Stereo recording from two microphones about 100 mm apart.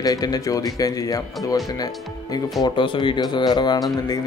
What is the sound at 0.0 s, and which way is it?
Speech, 40° left (ahead or behind).